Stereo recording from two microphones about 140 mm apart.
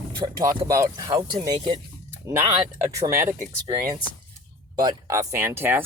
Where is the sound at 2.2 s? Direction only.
20° right (ahead or behind).